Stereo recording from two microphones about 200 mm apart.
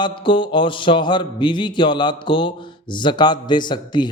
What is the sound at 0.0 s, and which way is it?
Speech, 25° left (ahead or behind).